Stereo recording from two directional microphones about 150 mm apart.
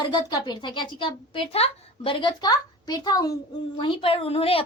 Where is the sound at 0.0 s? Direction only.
30° left (ahead or behind).